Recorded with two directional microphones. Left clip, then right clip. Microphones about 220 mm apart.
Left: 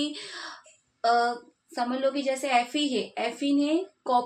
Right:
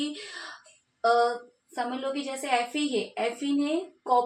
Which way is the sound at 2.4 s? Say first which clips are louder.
Left 2 dB; 45° left (ahead or behind).